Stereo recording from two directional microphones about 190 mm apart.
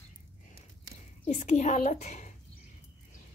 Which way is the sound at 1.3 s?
35° left (ahead or behind).